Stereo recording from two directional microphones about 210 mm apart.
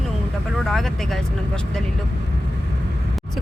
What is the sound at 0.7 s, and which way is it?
Speech, centre (ahead or behind).